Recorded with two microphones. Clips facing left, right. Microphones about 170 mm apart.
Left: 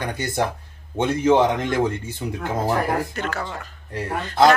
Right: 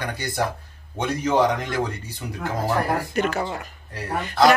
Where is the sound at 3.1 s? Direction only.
15° right (ahead or behind).